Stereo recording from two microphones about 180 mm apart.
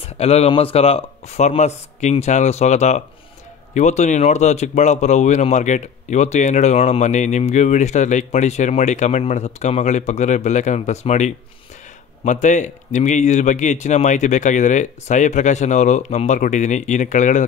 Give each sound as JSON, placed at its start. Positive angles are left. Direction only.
{"t": 0.0, "sound": "speech", "side_deg": 35}